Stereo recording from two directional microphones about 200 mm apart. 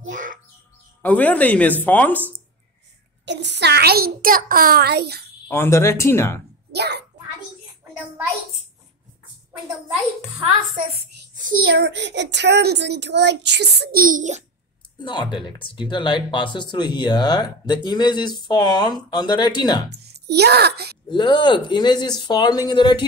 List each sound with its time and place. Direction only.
0.1 s music: 40° right (ahead or behind)
1.0 s speech: 5° left (ahead or behind)
3.3 s a child's voice: 60° right (ahead or behind)
5.5 s speech: 15° left (ahead or behind)
6.7 s a child's voice: 55° right (ahead or behind)
11.6 s a child's voice: 55° right (ahead or behind); by 14.4 s 40° right (ahead or behind)
15.0 s speech: 25° left (ahead or behind)
20.0 s a child's voice: 55° right (ahead or behind)
21.1 s speech: 25° left (ahead or behind)